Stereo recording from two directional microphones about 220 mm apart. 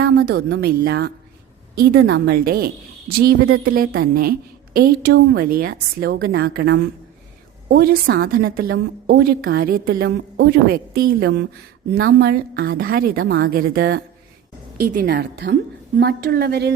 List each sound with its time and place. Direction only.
0.0 s a woman's voice: 45° right (ahead or behind)